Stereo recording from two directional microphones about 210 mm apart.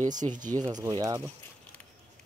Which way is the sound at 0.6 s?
15° right (ahead or behind).